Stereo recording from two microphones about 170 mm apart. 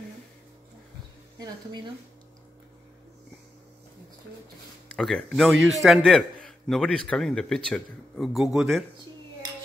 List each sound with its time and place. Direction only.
1.4 s speech: 25° right (ahead or behind)
4.8 s a man's voice: 5° left (ahead or behind)